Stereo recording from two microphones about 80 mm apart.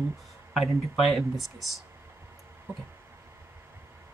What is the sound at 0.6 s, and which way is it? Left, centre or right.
Speech, centre.